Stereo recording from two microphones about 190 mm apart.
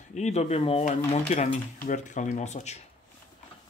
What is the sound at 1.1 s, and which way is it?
Speech, 35° left (ahead or behind).